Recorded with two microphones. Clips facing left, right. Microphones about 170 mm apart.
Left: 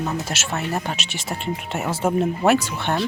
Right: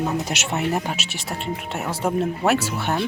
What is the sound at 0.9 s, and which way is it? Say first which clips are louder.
Speech: even; centre (ahead or behind).